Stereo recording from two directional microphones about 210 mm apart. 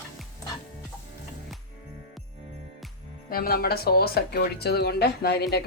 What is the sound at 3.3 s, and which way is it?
Speech, 45° left (ahead or behind).